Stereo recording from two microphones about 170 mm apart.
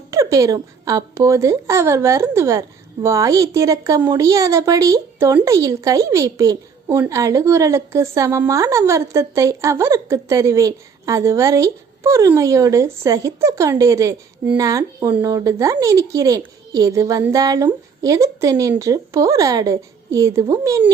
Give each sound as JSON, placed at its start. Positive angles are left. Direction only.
{"t": 0.1, "sound": "a woman's voice", "side_deg": -20}